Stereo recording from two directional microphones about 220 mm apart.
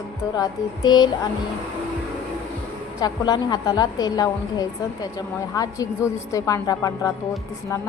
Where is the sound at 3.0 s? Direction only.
20° left (ahead or behind).